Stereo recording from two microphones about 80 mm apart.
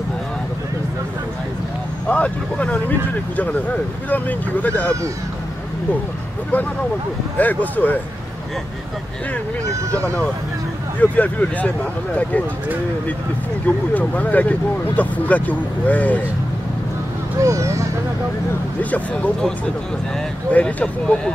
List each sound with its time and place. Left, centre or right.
2.0 s speech: centre
7.3 s speech: left
11.0 s speech: centre
13.9 s speech: centre
17.4 s speech: right
18.8 s speech: centre
20.5 s speech: centre